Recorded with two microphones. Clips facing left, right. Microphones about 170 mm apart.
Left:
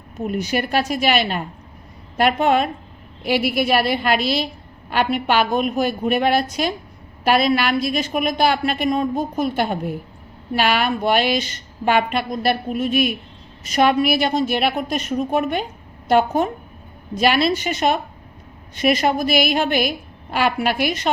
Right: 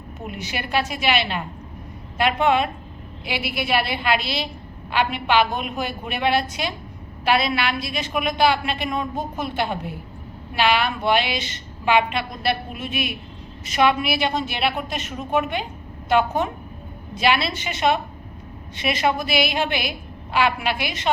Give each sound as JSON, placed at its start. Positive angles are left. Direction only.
{"t": 0.3, "sound": "a woman's voice", "side_deg": 40}